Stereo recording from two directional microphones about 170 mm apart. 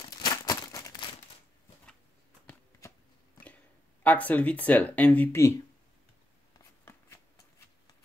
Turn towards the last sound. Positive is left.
turn(degrees=15)  # may be behind; listen again after turning